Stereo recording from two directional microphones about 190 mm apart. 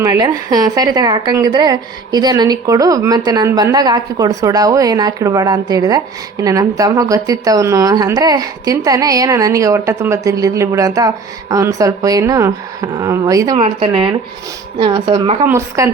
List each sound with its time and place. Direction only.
0.0 s a woman's voice: 20° right (ahead or behind)